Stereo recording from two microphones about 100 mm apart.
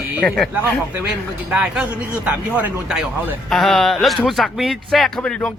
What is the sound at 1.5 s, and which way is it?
Speech, 5° right (ahead or behind).